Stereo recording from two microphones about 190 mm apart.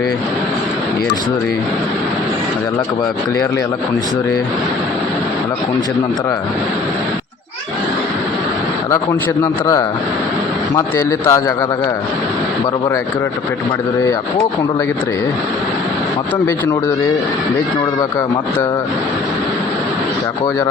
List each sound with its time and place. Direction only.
9.4 s a man's voice: 20° left (ahead or behind)